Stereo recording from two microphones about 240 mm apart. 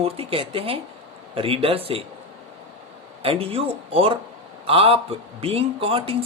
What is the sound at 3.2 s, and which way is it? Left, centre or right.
Speech, right.